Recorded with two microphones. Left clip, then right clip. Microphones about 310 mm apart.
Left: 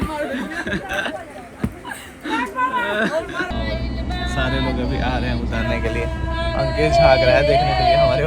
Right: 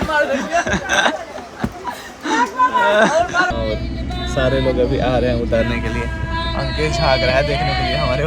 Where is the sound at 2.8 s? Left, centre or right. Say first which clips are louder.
Right 8 dB; centre.